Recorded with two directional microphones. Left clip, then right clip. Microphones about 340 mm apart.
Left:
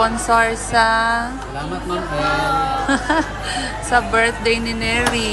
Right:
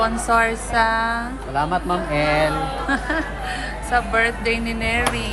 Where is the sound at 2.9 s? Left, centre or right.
Centre.